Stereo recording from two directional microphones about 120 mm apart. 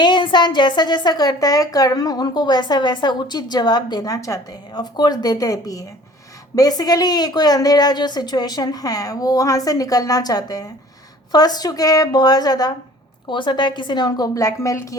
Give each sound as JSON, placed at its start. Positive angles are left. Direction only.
{"t": 0.0, "sound": "a woman's voice", "side_deg": 40}